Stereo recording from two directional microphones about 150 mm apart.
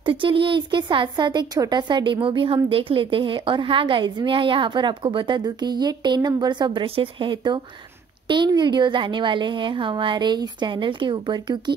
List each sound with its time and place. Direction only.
0.0 s a woman's voice: 35° right (ahead or behind)